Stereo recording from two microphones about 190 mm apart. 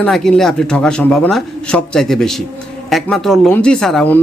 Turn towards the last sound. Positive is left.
turn(degrees=10)  # may be behind; listen again after turning